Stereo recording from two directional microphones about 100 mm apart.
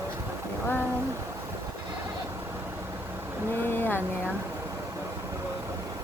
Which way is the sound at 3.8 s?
20° left (ahead or behind).